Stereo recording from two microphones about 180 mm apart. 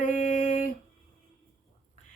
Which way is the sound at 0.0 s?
45° left (ahead or behind).